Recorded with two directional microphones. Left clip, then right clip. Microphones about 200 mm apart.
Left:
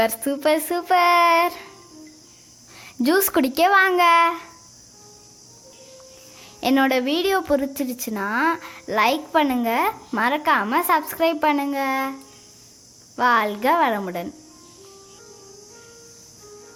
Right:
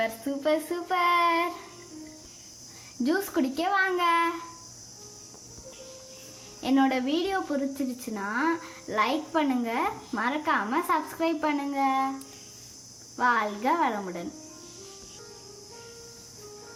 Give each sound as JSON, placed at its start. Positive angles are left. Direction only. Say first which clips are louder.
{"t": 0.0, "sound": "a woman's voice", "louder": "left 8 dB", "side_deg": 55}
{"t": 3.0, "sound": "a woman's voice", "louder": "left 8 dB", "side_deg": 55}
{"t": 6.6, "sound": "a woman's voice", "louder": "left 6 dB", "side_deg": 50}
{"t": 13.1, "sound": "a woman's voice", "louder": "left 6 dB", "side_deg": 50}